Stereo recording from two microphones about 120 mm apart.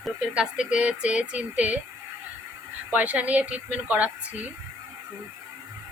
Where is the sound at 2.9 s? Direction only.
15° right (ahead or behind).